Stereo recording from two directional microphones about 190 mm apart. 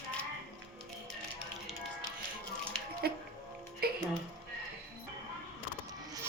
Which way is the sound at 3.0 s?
55° right (ahead or behind).